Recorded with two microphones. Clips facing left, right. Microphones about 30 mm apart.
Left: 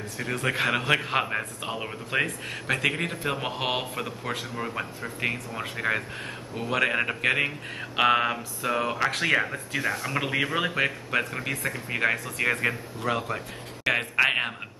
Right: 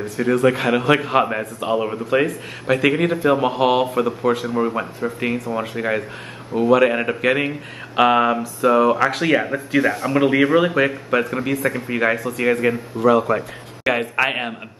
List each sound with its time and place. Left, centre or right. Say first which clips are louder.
0.2 s speech: right 10 dB; centre
2.8 s speech: right 10 dB; centre
9.5 s speech: right 10 dB; centre